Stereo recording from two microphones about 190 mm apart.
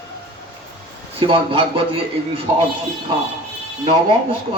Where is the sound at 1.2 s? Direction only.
30° right (ahead or behind).